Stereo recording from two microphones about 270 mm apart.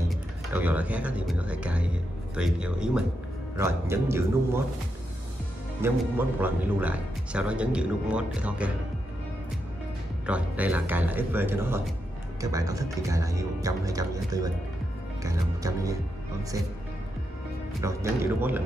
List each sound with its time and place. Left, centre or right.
0.5 s speech: centre
5.8 s speech: centre
10.2 s speech: centre
17.8 s speech: centre